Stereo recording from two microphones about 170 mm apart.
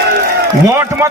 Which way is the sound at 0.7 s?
15° right (ahead or behind).